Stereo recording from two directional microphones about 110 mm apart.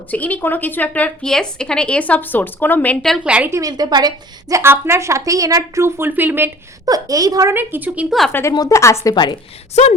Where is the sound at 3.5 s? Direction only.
35° right (ahead or behind).